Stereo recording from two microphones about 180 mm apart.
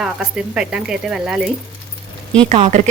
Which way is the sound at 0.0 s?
5° right (ahead or behind).